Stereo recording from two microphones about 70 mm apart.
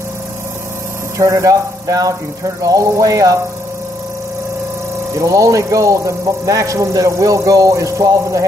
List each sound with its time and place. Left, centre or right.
1.1 s speech: right
5.1 s speech: right